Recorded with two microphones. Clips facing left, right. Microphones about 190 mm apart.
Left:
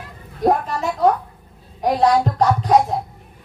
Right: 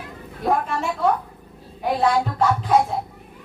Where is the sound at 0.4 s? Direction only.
40° left (ahead or behind).